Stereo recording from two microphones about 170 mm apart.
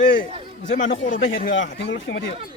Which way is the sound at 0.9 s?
50° left (ahead or behind).